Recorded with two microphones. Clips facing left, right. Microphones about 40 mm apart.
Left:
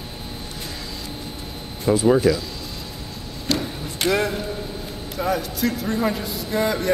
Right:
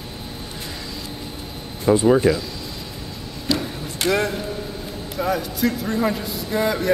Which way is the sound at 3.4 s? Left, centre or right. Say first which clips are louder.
Right 1 dB; centre.